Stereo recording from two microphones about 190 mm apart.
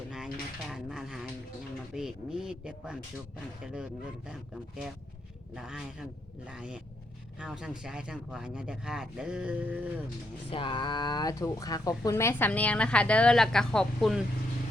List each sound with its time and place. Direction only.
0.7 s speech: centre (ahead or behind)
5.5 s speech: 5° right (ahead or behind)
10.5 s speech: 25° left (ahead or behind); by 14.2 s centre (ahead or behind)